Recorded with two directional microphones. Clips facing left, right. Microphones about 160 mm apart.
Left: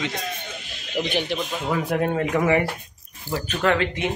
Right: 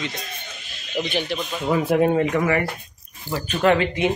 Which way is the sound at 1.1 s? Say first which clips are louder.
Left 1 dB; 15° left (ahead or behind).